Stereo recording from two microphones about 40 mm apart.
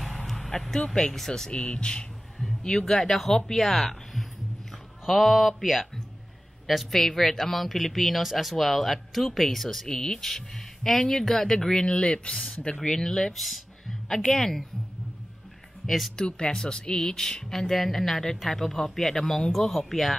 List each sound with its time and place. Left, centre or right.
0.0 s vehicle: centre
0.8 s speech: left
1.1 s speech: centre
1.5 s speech: left
2.9 s speech: centre
6.9 s speech: centre
12.8 s speech: centre
16.2 s speech: centre